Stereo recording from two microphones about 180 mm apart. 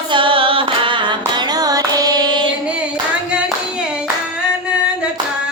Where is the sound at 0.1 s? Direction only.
30° right (ahead or behind).